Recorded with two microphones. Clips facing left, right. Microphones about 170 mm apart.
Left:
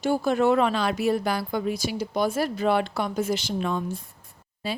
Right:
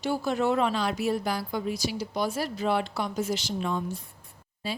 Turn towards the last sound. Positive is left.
turn(degrees=60)  # may be behind; listen again after turning